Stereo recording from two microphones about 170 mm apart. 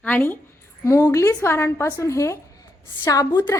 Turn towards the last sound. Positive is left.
turn(degrees=20)  # may be behind; listen again after turning